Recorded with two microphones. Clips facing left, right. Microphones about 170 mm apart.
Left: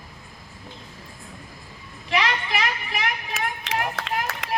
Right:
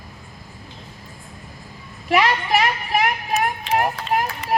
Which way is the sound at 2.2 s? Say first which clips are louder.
Right 6 dB; 45° right (ahead or behind).